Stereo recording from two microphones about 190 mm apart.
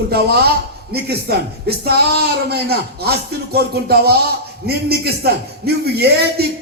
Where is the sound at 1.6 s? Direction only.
55° right (ahead or behind).